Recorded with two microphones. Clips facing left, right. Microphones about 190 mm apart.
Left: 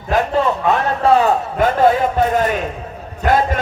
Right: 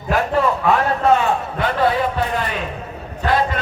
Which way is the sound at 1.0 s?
35° left (ahead or behind).